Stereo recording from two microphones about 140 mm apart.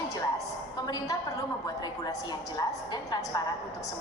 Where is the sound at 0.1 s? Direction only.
25° left (ahead or behind).